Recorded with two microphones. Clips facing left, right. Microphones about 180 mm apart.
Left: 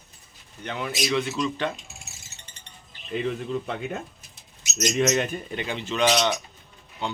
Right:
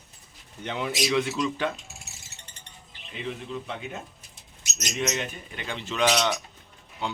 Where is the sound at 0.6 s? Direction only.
20° right (ahead or behind).